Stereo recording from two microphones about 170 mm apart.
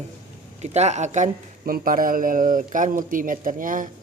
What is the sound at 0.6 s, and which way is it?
Speech, 40° right (ahead or behind).